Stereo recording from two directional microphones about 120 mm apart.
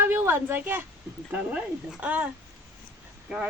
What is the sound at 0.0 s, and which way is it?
A woman's voice, 20° right (ahead or behind).